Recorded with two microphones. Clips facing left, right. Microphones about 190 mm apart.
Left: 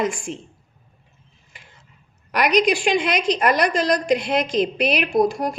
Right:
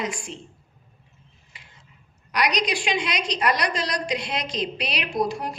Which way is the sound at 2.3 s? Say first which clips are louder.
Left 7 dB; 55° left (ahead or behind).